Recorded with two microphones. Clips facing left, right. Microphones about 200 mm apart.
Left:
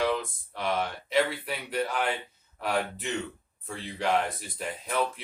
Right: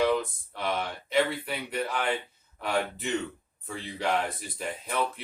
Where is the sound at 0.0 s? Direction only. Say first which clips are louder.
Right 3 dB; centre (ahead or behind).